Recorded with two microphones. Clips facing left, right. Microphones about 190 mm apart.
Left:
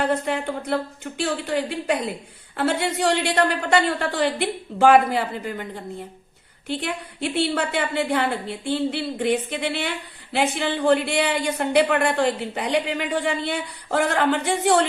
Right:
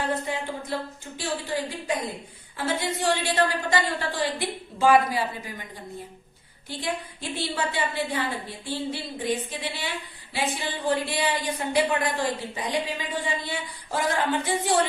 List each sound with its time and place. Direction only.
0.0 s a woman's voice: 70° left (ahead or behind)